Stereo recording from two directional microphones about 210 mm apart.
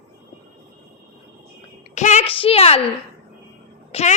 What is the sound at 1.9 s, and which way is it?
Speech, 35° left (ahead or behind).